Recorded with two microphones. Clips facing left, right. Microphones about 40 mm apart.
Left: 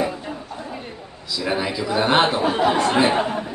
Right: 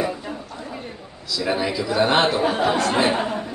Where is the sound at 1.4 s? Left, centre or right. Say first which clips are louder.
Right 1 dB; centre.